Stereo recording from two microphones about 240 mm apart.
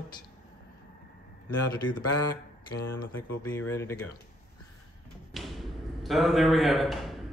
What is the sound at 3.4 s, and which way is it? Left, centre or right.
Mantra, centre.